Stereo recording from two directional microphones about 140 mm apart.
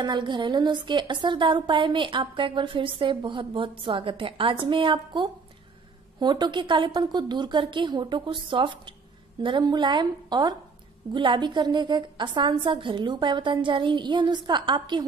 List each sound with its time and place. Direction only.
0.0 s a woman's voice: 30° right (ahead or behind)